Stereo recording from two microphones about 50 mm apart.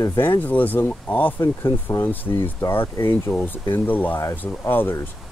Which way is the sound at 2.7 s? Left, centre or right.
Left.